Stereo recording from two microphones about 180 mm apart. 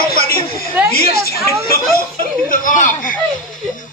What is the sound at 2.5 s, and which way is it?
Speech, 45° left (ahead or behind).